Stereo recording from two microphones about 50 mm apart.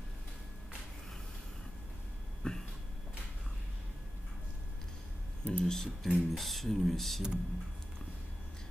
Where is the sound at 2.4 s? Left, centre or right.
Centre.